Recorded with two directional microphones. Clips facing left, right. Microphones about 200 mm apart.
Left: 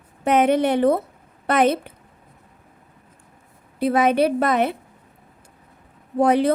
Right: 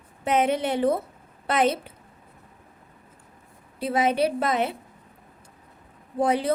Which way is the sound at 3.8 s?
60° left (ahead or behind).